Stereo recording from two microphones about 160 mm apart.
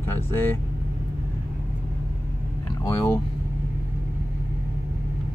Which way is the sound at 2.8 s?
20° left (ahead or behind).